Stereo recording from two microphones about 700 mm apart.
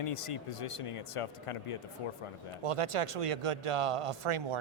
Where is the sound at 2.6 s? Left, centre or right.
Right.